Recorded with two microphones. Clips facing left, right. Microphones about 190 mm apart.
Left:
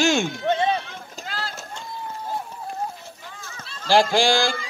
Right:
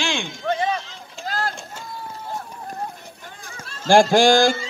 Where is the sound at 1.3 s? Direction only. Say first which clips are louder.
Right 7 dB; 45° right (ahead or behind).